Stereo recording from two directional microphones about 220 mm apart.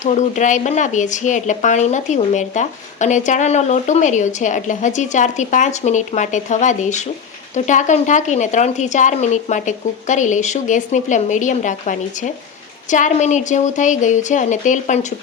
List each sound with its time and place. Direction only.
0.0 s speech: 35° left (ahead or behind)